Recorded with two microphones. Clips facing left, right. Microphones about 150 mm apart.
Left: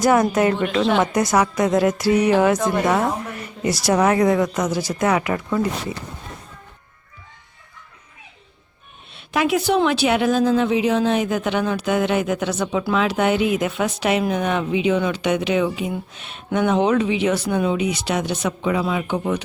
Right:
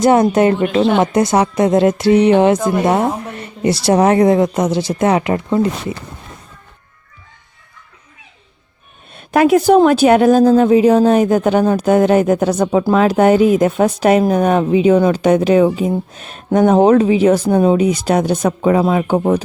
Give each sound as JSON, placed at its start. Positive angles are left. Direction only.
{"t": 0.0, "sound": "speech", "side_deg": -25}
{"t": 9.1, "sound": "a woman's voice", "side_deg": -45}